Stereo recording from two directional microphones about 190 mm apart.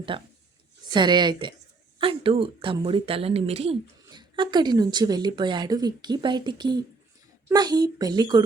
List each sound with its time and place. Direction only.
0.1 s speech: 30° right (ahead or behind)